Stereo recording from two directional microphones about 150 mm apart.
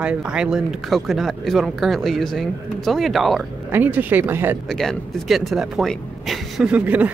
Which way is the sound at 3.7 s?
10° right (ahead or behind).